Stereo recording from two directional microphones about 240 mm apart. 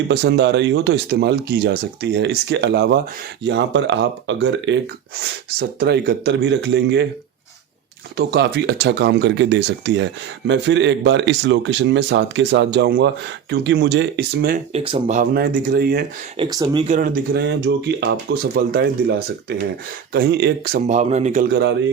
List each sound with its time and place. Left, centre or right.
0.1 s speech: right
8.1 s speech: right
14.7 s speech: right
16.4 s speech: centre; by 20.8 s right
20.8 s speech: right
21.5 s speech: right